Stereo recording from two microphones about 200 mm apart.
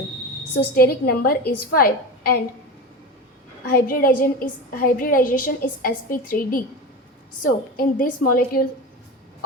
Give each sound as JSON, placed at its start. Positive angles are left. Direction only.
{"t": 0.5, "sound": "a woman's voice", "side_deg": 50}
{"t": 3.7, "sound": "a woman's voice", "side_deg": 45}